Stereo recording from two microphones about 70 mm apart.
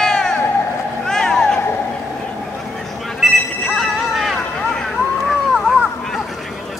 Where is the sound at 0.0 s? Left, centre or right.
Centre.